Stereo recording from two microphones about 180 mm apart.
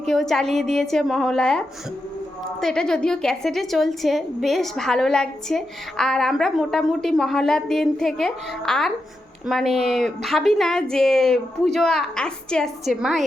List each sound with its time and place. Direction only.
0.0 s a woman's voice: centre (ahead or behind)